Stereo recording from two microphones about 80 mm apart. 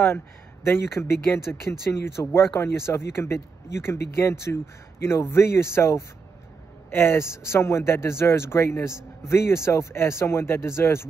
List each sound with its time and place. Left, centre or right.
0.7 s speech: left